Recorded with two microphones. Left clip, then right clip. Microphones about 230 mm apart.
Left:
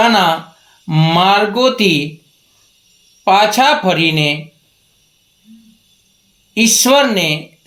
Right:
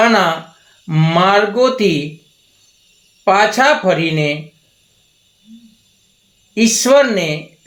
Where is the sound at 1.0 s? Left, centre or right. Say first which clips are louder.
Left 1 dB; left.